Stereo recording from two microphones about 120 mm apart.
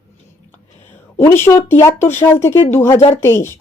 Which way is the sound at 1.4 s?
20° left (ahead or behind).